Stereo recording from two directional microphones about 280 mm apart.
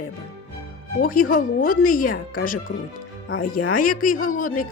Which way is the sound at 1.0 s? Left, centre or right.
Left.